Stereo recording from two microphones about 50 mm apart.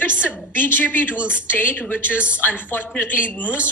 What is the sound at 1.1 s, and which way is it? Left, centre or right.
Speech, right.